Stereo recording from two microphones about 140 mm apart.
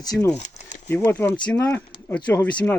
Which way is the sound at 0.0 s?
25° left (ahead or behind).